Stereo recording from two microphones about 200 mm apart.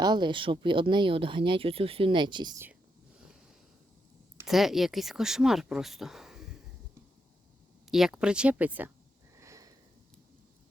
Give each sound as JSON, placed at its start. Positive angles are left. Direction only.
{"t": 0.0, "sound": "speech", "side_deg": -20}
{"t": 4.4, "sound": "speech", "side_deg": 0}
{"t": 7.9, "sound": "speech", "side_deg": 0}
{"t": 9.4, "sound": "sniff", "side_deg": -15}